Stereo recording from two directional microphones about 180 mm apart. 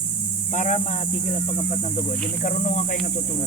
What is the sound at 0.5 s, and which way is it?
Speech, 45° left (ahead or behind).